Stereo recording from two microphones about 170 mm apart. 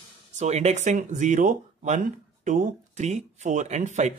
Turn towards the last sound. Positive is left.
turn(degrees=-45)  # may be behind; listen again after turning